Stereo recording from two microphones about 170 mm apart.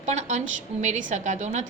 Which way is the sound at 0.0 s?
45° right (ahead or behind).